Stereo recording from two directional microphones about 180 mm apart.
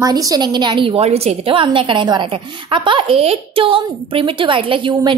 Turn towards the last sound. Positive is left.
turn(degrees=-25)  # may be behind; listen again after turning